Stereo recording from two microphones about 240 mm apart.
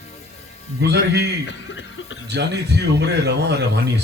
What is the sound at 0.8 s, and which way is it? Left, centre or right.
Speech, right.